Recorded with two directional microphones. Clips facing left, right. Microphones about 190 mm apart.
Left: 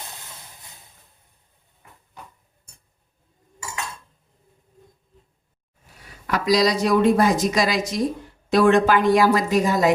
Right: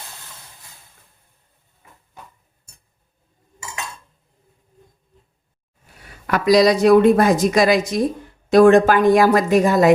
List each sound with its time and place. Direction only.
6.3 s a woman's voice: 55° right (ahead or behind)